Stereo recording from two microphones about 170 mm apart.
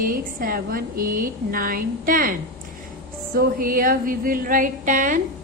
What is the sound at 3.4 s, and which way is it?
A woman's voice, 55° right (ahead or behind).